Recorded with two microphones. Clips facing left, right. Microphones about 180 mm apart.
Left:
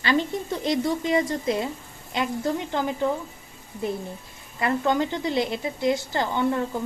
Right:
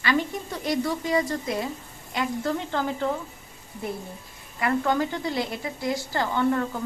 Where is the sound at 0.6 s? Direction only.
20° left (ahead or behind).